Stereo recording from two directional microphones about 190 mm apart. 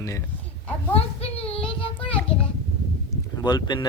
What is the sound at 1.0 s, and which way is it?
Child singing, 30° left (ahead or behind).